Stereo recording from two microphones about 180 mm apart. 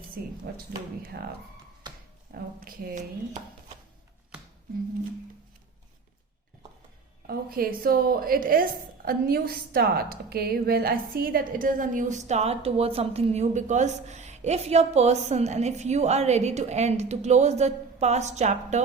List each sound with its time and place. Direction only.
0.5 s speech: 60° right (ahead or behind)
1.8 s a sound: 25° right (ahead or behind)
2.3 s a woman's voice: 50° right (ahead or behind)
7.3 s a woman's voice: 55° right (ahead or behind)